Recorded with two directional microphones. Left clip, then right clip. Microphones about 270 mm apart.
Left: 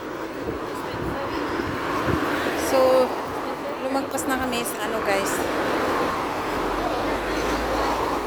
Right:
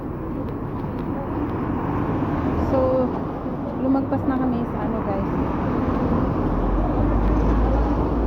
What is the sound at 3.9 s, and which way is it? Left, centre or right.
Speech, left.